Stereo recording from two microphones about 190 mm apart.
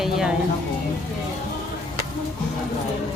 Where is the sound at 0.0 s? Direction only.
5° right (ahead or behind).